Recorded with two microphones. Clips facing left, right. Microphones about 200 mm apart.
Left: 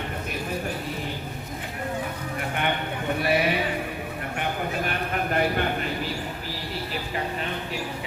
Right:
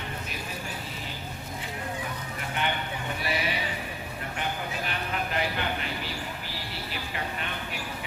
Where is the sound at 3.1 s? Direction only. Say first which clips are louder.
Left 9 dB; 55° left (ahead or behind).